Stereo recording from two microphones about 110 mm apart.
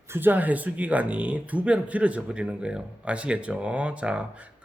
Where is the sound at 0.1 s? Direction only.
20° right (ahead or behind).